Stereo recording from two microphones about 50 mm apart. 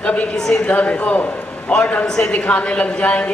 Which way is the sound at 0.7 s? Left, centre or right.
Left.